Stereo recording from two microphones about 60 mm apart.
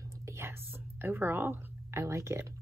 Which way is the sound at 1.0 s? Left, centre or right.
Right.